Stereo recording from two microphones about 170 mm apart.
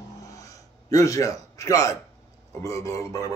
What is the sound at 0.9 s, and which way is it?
A man's voice, 20° left (ahead or behind).